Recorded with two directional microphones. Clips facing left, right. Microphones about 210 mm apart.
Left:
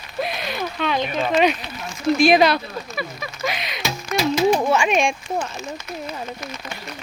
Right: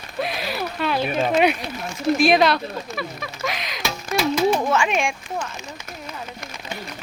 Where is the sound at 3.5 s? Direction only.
Centre (ahead or behind).